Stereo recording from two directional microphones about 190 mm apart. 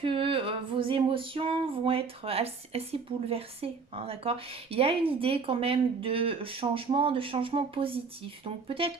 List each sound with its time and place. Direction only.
0.0 s female singing: 25° right (ahead or behind)